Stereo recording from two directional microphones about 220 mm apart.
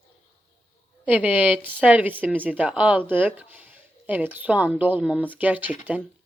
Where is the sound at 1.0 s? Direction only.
5° right (ahead or behind).